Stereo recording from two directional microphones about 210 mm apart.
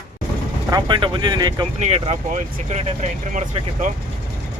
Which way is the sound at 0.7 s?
25° right (ahead or behind).